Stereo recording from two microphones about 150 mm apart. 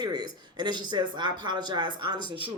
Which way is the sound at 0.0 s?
25° right (ahead or behind).